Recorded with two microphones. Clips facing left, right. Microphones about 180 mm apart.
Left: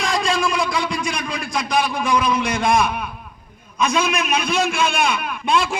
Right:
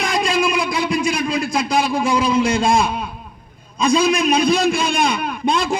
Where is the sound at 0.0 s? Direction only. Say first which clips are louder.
Right 2 dB; 20° right (ahead or behind).